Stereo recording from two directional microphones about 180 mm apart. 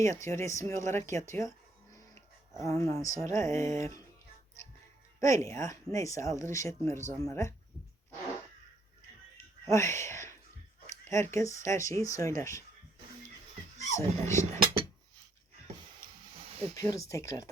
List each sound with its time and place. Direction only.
0.0 s speech: 15° left (ahead or behind)
2.6 s speech: 15° left (ahead or behind)
5.2 s speech: 15° left (ahead or behind)
9.6 s speech: 15° left (ahead or behind)
13.9 s speech: 15° left (ahead or behind)
16.7 s speech: 20° left (ahead or behind)